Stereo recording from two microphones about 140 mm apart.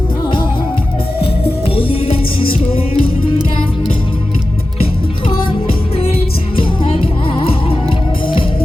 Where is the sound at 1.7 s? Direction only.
40° left (ahead or behind).